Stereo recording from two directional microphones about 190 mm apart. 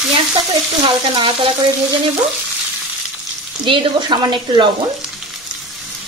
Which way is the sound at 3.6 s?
25° right (ahead or behind).